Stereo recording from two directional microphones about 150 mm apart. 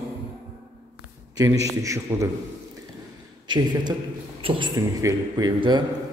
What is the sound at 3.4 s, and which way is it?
A man's voice, 30° right (ahead or behind).